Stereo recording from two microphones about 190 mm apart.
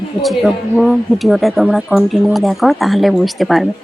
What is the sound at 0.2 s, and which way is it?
Speech, centre (ahead or behind).